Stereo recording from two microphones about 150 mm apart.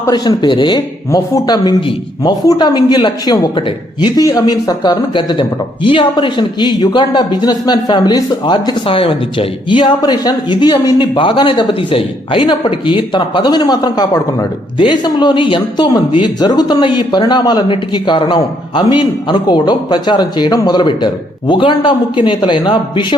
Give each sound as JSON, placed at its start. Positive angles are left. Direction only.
{"t": 0.1, "sound": "speech", "side_deg": 30}